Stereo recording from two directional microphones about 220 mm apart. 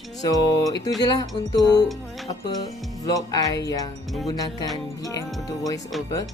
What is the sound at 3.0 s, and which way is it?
Speech, 15° left (ahead or behind).